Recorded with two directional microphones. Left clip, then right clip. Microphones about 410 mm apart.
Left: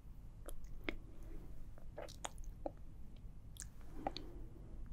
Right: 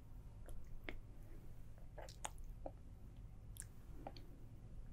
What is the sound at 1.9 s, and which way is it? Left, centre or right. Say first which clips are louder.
Squish: left 3 dB; centre.